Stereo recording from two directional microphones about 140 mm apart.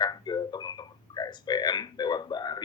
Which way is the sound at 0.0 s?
30° left (ahead or behind).